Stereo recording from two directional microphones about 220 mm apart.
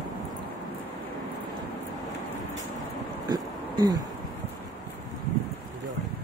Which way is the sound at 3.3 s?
20° right (ahead or behind).